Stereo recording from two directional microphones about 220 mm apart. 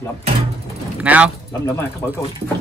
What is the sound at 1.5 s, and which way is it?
Speech, 15° left (ahead or behind).